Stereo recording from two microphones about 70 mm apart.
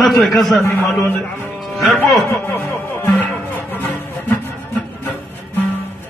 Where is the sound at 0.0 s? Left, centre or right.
Centre.